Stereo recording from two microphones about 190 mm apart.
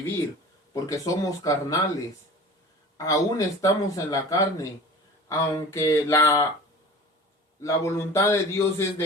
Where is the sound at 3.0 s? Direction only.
20° left (ahead or behind).